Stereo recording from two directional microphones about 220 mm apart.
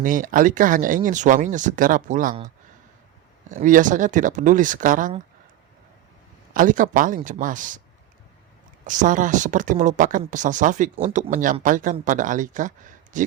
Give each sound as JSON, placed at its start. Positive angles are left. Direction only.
{"t": 0.0, "sound": "speech", "side_deg": -40}
{"t": 3.5, "sound": "speech", "side_deg": -35}
{"t": 6.5, "sound": "speech", "side_deg": -40}
{"t": 8.9, "sound": "speech", "side_deg": -35}